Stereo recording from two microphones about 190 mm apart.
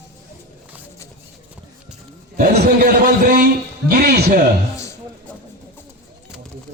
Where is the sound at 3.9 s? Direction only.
50° right (ahead or behind).